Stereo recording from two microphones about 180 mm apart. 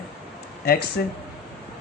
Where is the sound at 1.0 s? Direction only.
65° left (ahead or behind).